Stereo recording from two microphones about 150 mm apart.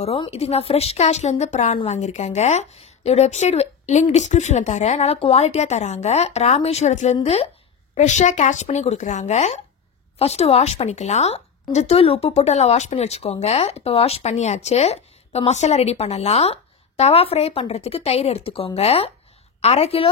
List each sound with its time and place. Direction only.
0.0 s a woman's voice: 40° left (ahead or behind)